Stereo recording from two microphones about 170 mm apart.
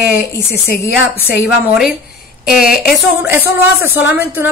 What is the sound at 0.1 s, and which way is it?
Speech, 65° left (ahead or behind).